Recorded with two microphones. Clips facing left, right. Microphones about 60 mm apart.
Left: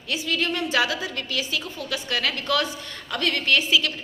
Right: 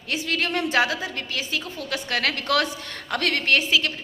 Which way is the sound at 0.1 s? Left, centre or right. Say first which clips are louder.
Even; right.